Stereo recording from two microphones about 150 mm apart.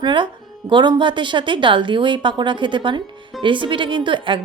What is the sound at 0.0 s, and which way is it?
Speech, 30° right (ahead or behind).